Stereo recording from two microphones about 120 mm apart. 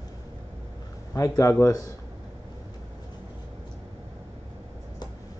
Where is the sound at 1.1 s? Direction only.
30° left (ahead or behind).